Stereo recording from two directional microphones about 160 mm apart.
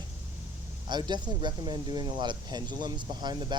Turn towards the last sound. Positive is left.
turn(degrees=-25)  # may be behind; listen again after turning